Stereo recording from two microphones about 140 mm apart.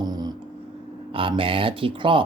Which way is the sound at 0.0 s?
30° right (ahead or behind).